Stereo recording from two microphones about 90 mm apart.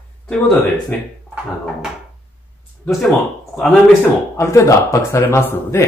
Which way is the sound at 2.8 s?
5° left (ahead or behind).